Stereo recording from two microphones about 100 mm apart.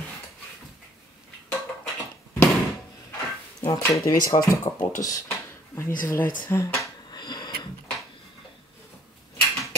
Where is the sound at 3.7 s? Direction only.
35° left (ahead or behind).